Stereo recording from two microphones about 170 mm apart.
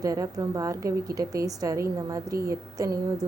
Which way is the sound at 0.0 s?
20° right (ahead or behind).